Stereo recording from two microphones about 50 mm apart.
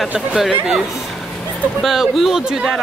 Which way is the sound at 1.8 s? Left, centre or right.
Centre.